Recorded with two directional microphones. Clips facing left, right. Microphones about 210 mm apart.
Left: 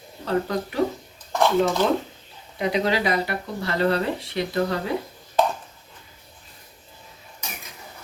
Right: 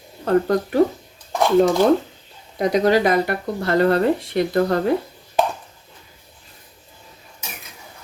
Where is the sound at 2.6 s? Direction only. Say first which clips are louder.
Right 6 dB; 45° right (ahead or behind).